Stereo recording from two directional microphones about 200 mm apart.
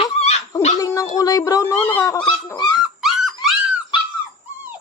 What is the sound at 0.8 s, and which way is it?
Dog, 15° left (ahead or behind).